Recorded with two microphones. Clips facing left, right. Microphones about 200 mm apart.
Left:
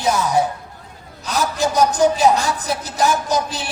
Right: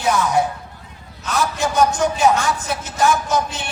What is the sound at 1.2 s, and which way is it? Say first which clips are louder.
A man's voice: left 1 dB; 35° left (ahead or behind).